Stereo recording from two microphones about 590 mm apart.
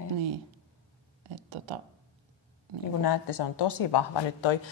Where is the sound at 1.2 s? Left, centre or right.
Right.